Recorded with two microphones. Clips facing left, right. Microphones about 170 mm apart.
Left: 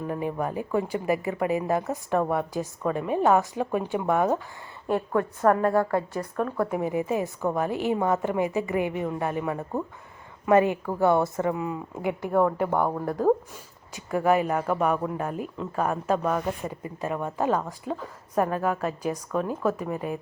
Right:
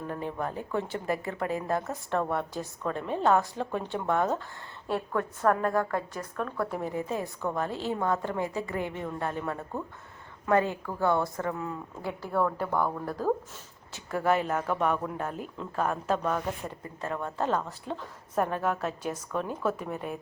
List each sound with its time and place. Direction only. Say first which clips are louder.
0.1 s speech: left 5 dB; 10° left (ahead or behind)
14.1 s speech: left 4 dB; 10° left (ahead or behind)